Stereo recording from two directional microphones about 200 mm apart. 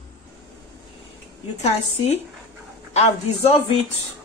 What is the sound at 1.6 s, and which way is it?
A woman's voice, 35° left (ahead or behind).